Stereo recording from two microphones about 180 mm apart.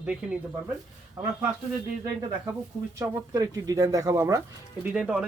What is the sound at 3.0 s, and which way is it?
Speech, 20° right (ahead or behind).